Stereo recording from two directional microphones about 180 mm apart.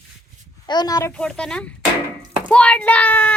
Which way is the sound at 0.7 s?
20° left (ahead or behind).